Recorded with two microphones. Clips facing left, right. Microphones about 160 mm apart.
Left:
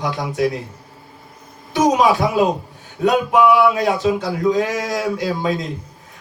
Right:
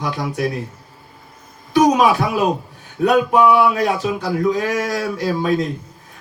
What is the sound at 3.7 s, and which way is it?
A man's voice, 20° left (ahead or behind).